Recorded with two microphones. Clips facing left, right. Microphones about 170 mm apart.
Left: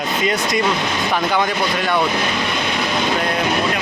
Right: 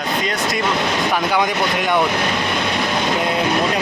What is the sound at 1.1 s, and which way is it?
Speech, 15° right (ahead or behind).